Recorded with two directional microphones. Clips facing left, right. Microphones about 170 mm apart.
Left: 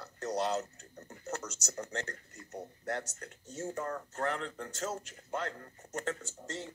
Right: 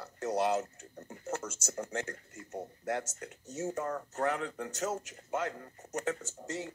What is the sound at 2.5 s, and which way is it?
Speech, 20° right (ahead or behind).